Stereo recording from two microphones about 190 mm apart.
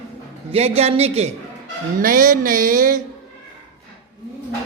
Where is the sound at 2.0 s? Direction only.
45° right (ahead or behind).